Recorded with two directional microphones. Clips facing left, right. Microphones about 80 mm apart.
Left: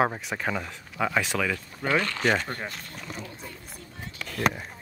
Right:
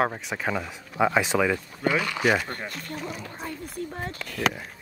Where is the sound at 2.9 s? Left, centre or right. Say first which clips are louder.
Right 4 dB; right.